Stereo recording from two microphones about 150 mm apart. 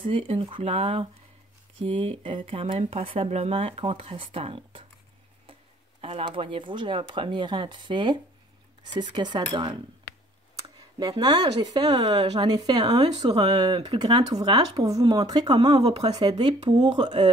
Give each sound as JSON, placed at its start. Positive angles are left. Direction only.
{"t": 0.0, "sound": "speech", "side_deg": -35}
{"t": 11.0, "sound": "speech", "side_deg": -25}